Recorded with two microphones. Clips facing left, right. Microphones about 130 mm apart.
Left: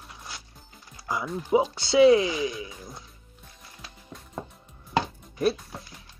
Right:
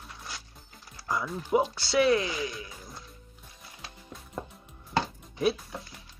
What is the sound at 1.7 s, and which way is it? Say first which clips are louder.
Speech: left 6 dB; 20° left (ahead or behind).